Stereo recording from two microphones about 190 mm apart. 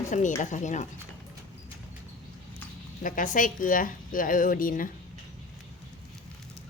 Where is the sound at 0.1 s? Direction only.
40° left (ahead or behind).